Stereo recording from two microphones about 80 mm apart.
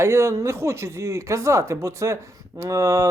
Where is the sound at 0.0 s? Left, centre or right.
Right.